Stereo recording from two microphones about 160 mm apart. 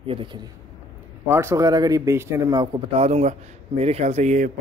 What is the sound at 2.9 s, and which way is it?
Speech, 40° right (ahead or behind).